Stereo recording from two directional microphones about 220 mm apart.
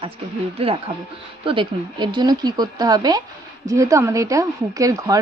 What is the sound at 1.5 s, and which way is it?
Speech, 20° right (ahead or behind).